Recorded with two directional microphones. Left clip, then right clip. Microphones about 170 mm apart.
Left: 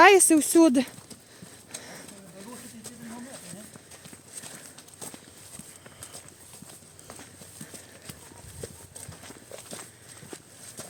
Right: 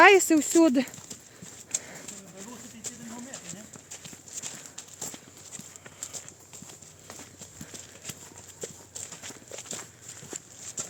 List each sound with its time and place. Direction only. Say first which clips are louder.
0.0 s speech: left 1 dB; 15° left (ahead or behind)
1.8 s horse: left 1 dB; 15° left (ahead or behind)
2.0 s clip-clop: right 1 dB; centre (ahead or behind)
4.0 s walk: right 5 dB; centre (ahead or behind)
8.6 s walk: right 3 dB; centre (ahead or behind)